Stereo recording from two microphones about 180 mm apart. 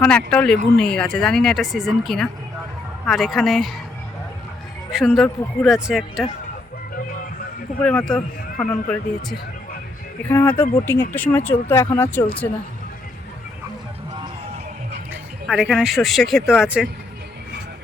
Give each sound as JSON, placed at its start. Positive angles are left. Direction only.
{"t": 0.0, "sound": "speech", "side_deg": 5}
{"t": 4.9, "sound": "speech", "side_deg": 0}
{"t": 6.9, "sound": "music", "side_deg": 55}
{"t": 7.8, "sound": "speech", "side_deg": 5}
{"t": 15.1, "sound": "speech", "side_deg": -5}